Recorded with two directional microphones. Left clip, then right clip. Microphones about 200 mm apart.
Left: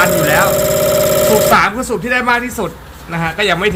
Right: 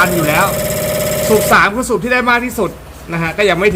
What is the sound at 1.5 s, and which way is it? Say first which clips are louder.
A man's voice: right 1 dB; 20° right (ahead or behind).